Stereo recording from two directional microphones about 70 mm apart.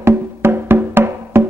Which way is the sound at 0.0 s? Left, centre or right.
Right.